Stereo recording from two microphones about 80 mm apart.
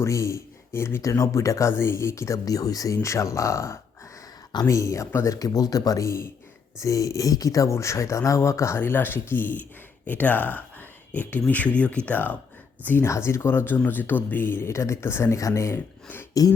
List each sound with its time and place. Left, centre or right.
0.0 s speech: left
5.4 s speech: left
8.8 s speech: left
13.1 s speech: left
16.3 s throat clearing: left